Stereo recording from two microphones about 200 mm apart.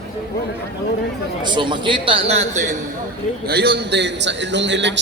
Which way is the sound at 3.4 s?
55° right (ahead or behind).